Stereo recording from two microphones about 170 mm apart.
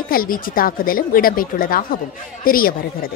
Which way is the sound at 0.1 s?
55° left (ahead or behind).